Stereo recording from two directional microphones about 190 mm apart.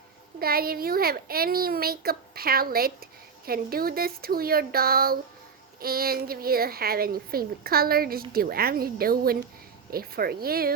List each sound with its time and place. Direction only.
0.3 s speech: 50° right (ahead or behind)